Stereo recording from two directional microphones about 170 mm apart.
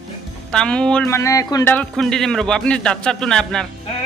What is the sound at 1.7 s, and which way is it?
A man's voice, 5° left (ahead or behind).